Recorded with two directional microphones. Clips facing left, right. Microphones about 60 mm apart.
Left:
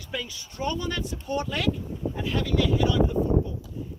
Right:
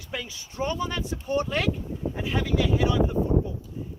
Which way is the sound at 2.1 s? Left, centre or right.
Centre.